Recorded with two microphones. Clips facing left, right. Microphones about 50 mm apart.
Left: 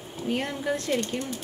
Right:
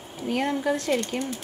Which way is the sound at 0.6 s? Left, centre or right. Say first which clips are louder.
Right 2 dB; right.